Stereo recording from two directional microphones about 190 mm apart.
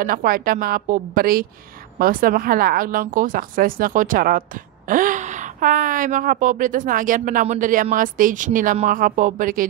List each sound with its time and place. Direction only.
0.0 s speech: 50° right (ahead or behind)